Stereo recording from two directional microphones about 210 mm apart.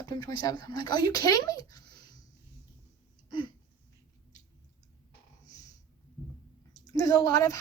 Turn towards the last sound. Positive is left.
turn(degrees=15)  # may be behind; listen again after turning